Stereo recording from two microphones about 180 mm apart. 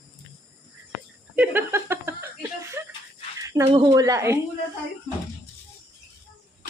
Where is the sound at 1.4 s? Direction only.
10° right (ahead or behind).